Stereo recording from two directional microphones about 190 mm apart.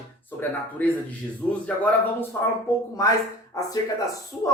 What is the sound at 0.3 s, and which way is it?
Speech, 10° left (ahead or behind).